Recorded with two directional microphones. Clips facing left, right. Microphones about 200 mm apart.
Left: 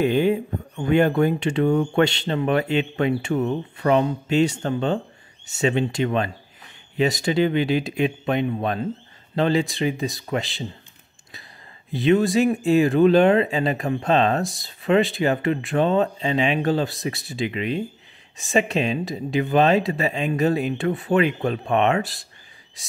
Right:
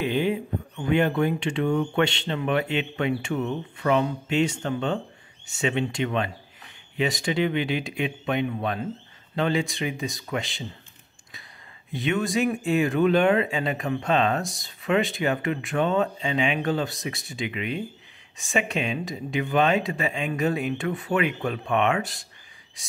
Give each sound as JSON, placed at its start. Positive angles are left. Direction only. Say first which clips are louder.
{"t": 0.0, "sound": "speech", "louder": "left 5 dB", "side_deg": 45}
{"t": 11.9, "sound": "speech", "louder": "left 7 dB", "side_deg": 35}